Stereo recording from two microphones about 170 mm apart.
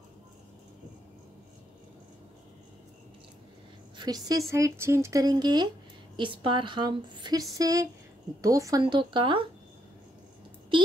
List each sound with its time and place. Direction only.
4.0 s speech: 20° right (ahead or behind)
10.7 s speech: 30° right (ahead or behind)